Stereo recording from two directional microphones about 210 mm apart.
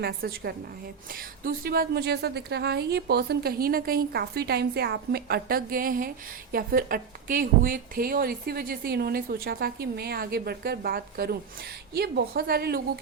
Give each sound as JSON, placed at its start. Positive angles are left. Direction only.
{"t": 0.0, "sound": "a woman's voice", "side_deg": -50}